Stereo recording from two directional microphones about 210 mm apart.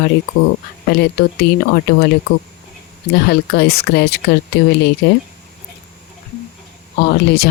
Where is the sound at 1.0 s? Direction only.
50° left (ahead or behind).